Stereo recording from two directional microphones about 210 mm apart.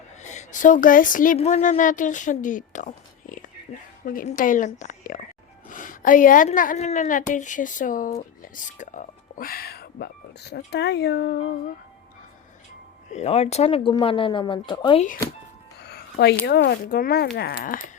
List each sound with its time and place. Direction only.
0.2 s a woman's voice: 35° left (ahead or behind)
13.1 s speech: 30° left (ahead or behind)
15.8 s music: 50° left (ahead or behind)
16.5 s speech: 50° left (ahead or behind)